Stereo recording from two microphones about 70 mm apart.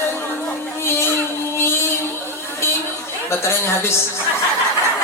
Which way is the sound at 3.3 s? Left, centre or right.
Left.